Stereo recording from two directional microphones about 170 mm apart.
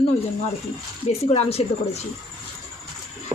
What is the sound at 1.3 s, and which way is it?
Speech, 35° left (ahead or behind).